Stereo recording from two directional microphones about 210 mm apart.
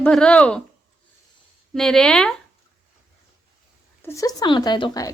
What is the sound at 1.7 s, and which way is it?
Speech, centre (ahead or behind).